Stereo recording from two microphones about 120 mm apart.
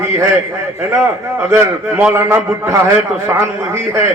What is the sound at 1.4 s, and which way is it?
Speech, 20° right (ahead or behind).